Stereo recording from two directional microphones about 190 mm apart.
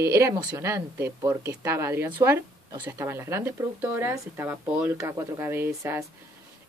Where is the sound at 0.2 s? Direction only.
20° right (ahead or behind).